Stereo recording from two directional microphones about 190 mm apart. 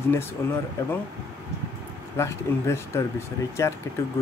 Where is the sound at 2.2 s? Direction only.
15° left (ahead or behind).